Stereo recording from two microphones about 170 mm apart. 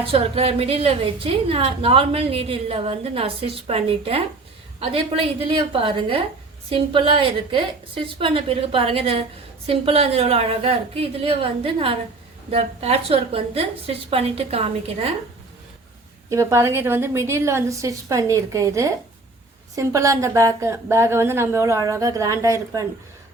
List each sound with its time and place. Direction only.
0.0 s a woman's voice: 35° right (ahead or behind)
16.3 s a woman's voice: 15° right (ahead or behind)